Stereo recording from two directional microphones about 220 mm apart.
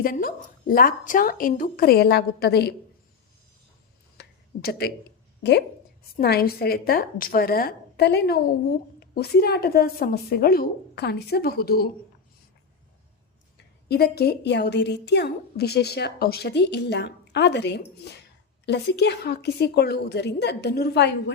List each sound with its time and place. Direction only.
0.0 s a woman's voice: 40° left (ahead or behind)
4.2 s a sound: 45° left (ahead or behind)
5.4 s a woman's voice: 50° left (ahead or behind)
13.8 s a woman's voice: 45° left (ahead or behind)